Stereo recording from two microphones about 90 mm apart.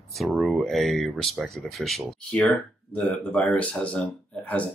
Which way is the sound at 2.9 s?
15° left (ahead or behind).